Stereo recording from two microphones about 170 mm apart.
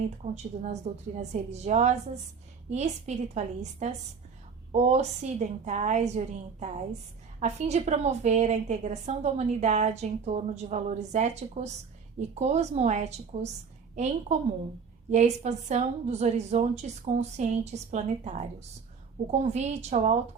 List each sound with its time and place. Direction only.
0.3 s a woman's voice: 40° right (ahead or behind)